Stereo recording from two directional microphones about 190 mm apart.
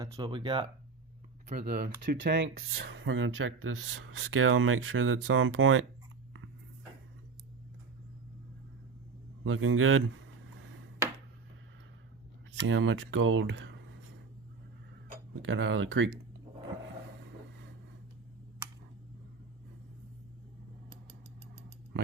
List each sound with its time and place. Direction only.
0.0 s speech: 20° right (ahead or behind)
1.5 s speech: 55° right (ahead or behind); by 2.5 s 75° right (ahead or behind)
2.6 s speech: 60° right (ahead or behind); by 5.8 s 90° right
9.4 s speech: 90° right
11.0 s a sound: 15° right (ahead or behind)
12.6 s speech: 80° right
15.4 s speech: 80° right